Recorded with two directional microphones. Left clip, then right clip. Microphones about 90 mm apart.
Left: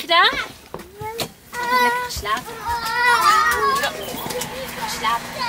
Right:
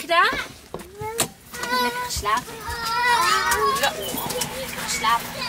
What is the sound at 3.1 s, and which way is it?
Speech, 35° left (ahead or behind).